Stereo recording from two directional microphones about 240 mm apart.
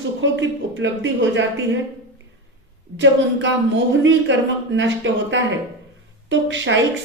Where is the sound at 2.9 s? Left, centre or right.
Right.